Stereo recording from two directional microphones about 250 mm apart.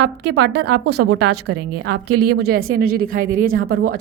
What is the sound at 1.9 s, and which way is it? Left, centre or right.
Speech, right.